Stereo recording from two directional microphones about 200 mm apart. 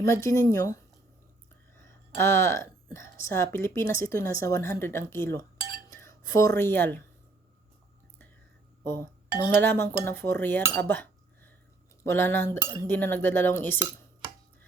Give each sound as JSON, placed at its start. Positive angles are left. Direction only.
{"t": 0.0, "sound": "speech", "side_deg": 15}
{"t": 5.9, "sound": "cutlery", "side_deg": 15}
{"t": 6.6, "sound": "speech", "side_deg": 10}
{"t": 8.8, "sound": "speech", "side_deg": 10}
{"t": 10.1, "sound": "cutlery", "side_deg": 10}
{"t": 12.0, "sound": "speech", "side_deg": 10}